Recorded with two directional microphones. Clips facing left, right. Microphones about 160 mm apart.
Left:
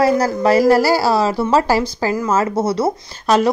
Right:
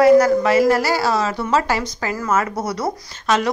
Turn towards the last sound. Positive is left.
turn(degrees=35)  # may be behind; listen again after turning